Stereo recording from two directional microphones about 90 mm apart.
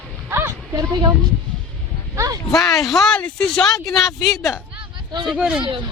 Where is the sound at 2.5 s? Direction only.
Centre (ahead or behind).